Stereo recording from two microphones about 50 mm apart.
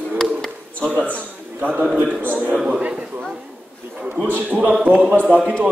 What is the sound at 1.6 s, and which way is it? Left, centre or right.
A man's voice, right.